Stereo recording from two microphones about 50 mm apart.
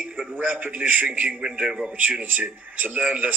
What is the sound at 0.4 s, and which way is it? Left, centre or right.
A man's voice, right.